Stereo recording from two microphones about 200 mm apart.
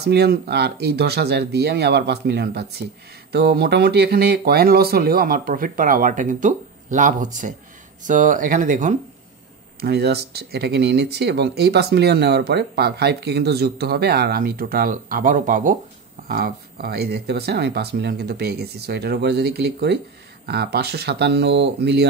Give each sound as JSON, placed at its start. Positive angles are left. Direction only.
{"t": 0.0, "sound": "speech", "side_deg": -55}
{"t": 9.8, "sound": "speech", "side_deg": -55}